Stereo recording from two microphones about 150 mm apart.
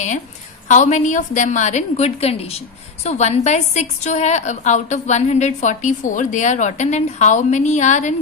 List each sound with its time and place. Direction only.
0.7 s a woman's voice: 55° left (ahead or behind)